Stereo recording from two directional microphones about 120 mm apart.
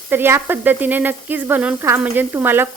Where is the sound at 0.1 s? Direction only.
20° right (ahead or behind).